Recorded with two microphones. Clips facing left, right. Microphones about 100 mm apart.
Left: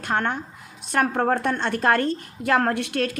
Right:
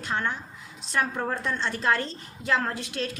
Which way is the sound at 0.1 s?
60° left (ahead or behind).